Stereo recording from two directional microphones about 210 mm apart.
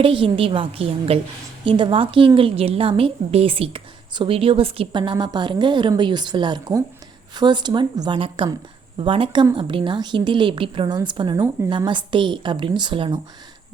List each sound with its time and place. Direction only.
0.0 s a woman's voice: 25° right (ahead or behind)